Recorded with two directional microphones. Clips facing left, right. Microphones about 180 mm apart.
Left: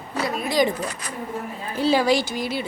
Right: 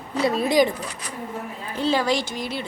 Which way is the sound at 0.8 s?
45° left (ahead or behind).